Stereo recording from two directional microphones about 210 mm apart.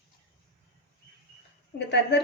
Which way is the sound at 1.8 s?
55° left (ahead or behind).